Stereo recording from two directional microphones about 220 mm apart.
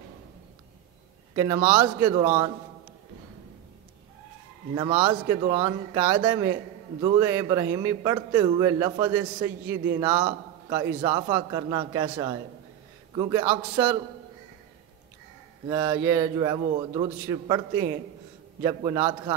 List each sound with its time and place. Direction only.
1.3 s a man's voice: 15° right (ahead or behind)
5.0 s a man's voice: 20° right (ahead or behind)
15.7 s a man's voice: 15° right (ahead or behind)